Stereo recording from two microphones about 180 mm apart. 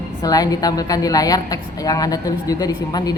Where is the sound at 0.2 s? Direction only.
20° left (ahead or behind).